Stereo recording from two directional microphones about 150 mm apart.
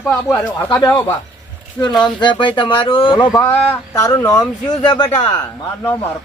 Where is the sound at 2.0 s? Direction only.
30° left (ahead or behind).